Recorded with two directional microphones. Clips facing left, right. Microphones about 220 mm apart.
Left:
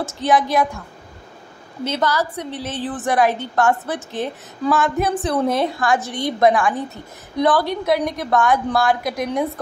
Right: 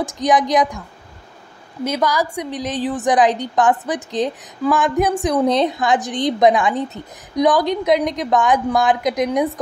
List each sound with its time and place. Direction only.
0.0 s a woman's voice: 15° right (ahead or behind)
1.9 s a woman's voice: 10° right (ahead or behind)